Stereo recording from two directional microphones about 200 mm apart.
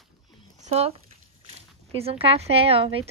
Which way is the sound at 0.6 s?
30° right (ahead or behind).